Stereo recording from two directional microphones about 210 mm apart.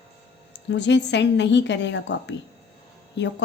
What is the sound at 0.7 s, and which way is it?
A woman's voice, 55° left (ahead or behind).